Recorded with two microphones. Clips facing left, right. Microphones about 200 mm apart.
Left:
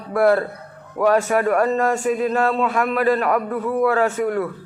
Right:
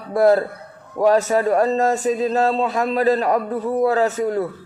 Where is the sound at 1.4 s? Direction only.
25° right (ahead or behind).